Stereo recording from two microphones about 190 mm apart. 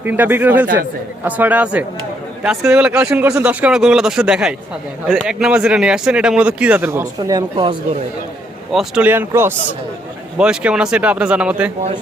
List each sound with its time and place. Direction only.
0.0 s a man's voice: 10° right (ahead or behind)
8.7 s a man's voice: 5° right (ahead or behind)